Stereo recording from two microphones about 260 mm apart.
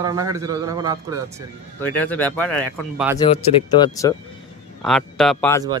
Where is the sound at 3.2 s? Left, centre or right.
Centre.